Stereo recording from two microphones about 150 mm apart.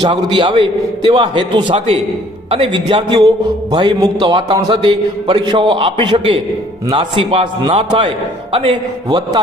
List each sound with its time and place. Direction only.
0.0 s a man's voice: 30° right (ahead or behind)
9.0 s a man's voice: 25° right (ahead or behind)